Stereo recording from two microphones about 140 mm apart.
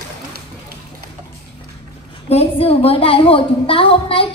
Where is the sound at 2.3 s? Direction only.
45° left (ahead or behind).